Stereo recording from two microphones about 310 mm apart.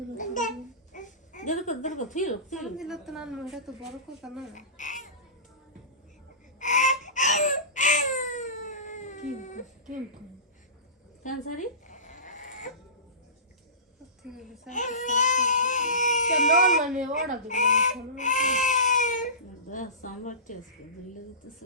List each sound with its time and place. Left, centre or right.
0.2 s babbling: left
0.9 s a sound: left
2.6 s a woman's voice: centre
4.5 s babbling: left
6.6 s baby cry: left
11.2 s a sound: left
14.3 s a woman's voice: centre
14.7 s speech: left
16.7 s a woman's voice: centre
17.5 s crying: left
19.7 s a woman's voice: left